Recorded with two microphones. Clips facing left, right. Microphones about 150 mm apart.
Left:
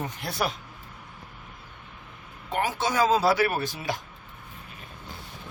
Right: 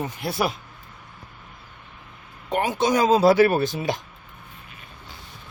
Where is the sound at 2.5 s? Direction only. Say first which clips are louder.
Right 5 dB; 20° right (ahead or behind).